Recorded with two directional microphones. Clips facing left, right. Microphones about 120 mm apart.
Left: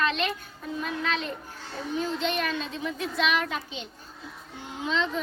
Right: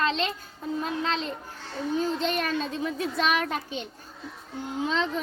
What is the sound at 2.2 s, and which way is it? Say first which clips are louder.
A child's voice: right 1 dB; 45° right (ahead or behind).